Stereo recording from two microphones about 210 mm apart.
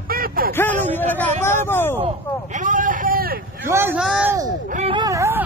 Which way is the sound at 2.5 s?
40° right (ahead or behind).